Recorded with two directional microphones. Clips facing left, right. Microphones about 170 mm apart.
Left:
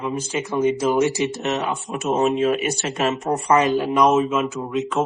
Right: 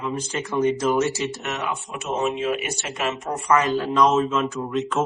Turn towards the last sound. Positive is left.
turn(degrees=0)  # may be behind; listen again after turning